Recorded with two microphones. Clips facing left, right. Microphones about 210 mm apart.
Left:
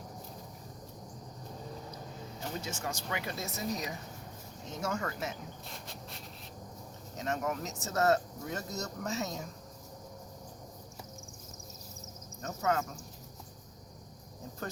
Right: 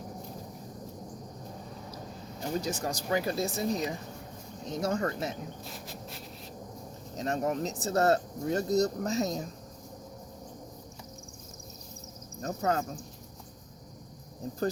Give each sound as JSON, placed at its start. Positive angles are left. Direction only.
{"t": 2.6, "sound": "speech", "side_deg": -35}
{"t": 5.7, "sound": "a sound", "side_deg": -5}
{"t": 7.2, "sound": "speech", "side_deg": -35}
{"t": 12.4, "sound": "speech", "side_deg": -35}